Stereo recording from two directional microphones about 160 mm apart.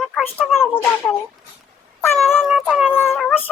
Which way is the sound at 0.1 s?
Centre (ahead or behind).